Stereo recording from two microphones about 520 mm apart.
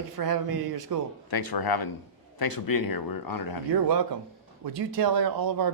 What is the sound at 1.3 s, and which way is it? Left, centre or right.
Speech, left.